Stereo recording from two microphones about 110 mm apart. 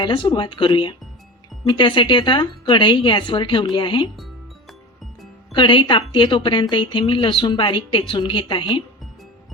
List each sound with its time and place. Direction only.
0.0 s speech: 45° left (ahead or behind)
5.5 s speech: 45° left (ahead or behind)